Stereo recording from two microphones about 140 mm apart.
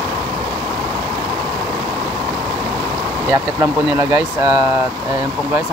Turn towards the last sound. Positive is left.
turn(degrees=-30)  # may be behind; listen again after turning